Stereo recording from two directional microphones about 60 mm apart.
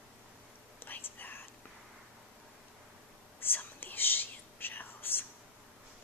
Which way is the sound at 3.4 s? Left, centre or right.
Left.